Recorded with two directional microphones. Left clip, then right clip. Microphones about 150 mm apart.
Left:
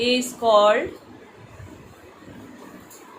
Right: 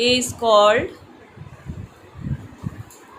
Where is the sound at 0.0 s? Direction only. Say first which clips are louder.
Right 2 dB; 40° right (ahead or behind).